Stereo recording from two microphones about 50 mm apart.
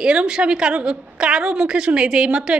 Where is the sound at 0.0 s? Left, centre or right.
Right.